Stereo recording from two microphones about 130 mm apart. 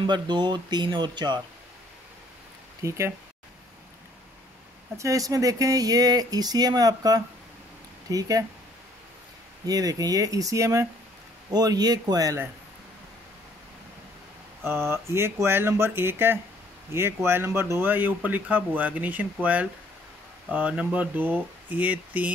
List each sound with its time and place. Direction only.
0.0 s speech: 35° right (ahead or behind)
2.8 s speech: 20° right (ahead or behind)
4.9 s speech: 25° right (ahead or behind)
9.7 s speech: 30° right (ahead or behind)
14.6 s speech: 20° right (ahead or behind)